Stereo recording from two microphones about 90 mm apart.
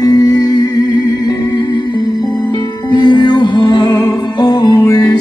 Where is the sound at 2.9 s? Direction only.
55° left (ahead or behind).